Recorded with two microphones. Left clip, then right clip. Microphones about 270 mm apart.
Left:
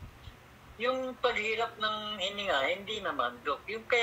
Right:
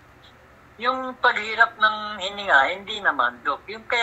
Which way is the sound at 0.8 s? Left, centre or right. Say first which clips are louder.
Right 9 dB; centre.